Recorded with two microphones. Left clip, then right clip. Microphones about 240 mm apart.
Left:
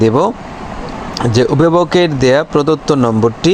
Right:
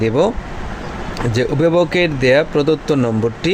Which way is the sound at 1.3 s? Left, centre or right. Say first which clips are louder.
Left 4 dB; centre.